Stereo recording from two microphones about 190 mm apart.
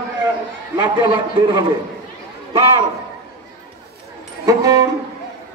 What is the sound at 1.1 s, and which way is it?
Speech, 25° right (ahead or behind).